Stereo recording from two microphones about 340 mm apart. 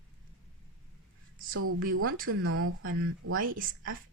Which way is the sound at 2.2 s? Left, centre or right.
Right.